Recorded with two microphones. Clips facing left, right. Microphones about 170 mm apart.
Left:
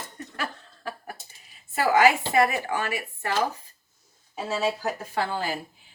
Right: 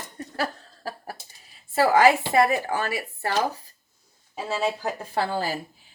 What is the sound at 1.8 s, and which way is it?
A woman's voice, 35° right (ahead or behind).